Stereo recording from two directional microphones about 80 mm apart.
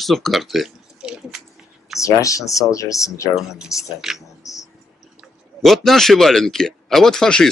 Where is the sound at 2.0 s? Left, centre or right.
Left.